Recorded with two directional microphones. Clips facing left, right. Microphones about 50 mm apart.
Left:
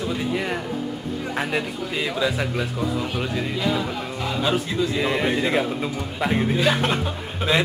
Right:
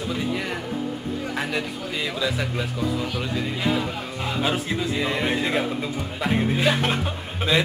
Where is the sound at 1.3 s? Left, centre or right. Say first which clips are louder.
Left 4 dB; centre.